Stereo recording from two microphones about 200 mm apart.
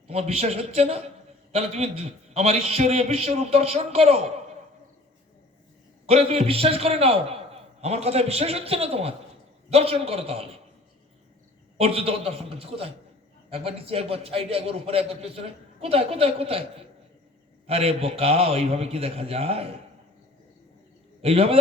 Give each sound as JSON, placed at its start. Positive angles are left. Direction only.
{"t": 0.1, "sound": "a man's voice", "side_deg": -30}
{"t": 6.1, "sound": "a man's voice", "side_deg": -30}
{"t": 11.8, "sound": "a man's voice", "side_deg": -30}
{"t": 21.2, "sound": "a man's voice", "side_deg": -30}